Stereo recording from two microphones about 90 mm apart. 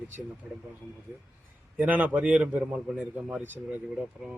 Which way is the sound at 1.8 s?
15° right (ahead or behind).